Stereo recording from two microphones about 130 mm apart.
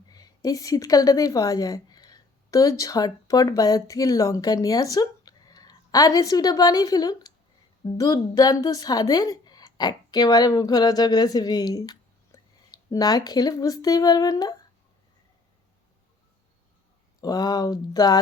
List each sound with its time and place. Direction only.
0.1 s a woman's voice: 30° left (ahead or behind)
17.2 s speech: 30° left (ahead or behind)